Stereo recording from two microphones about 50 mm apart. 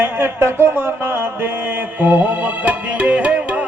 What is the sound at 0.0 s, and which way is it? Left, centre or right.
Speech, right.